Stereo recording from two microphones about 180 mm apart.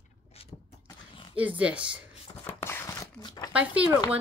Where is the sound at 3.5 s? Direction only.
5° right (ahead or behind).